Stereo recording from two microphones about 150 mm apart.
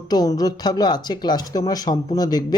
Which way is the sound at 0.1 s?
25° left (ahead or behind).